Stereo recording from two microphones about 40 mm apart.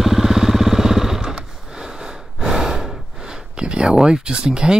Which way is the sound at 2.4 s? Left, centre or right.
Centre.